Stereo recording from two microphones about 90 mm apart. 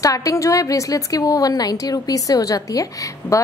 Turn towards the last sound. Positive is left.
turn(degrees=40)  # may be behind; listen again after turning